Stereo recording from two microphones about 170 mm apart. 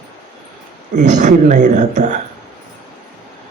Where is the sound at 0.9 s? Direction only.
45° right (ahead or behind).